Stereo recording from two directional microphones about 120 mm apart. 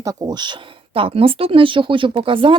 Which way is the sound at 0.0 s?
30° right (ahead or behind).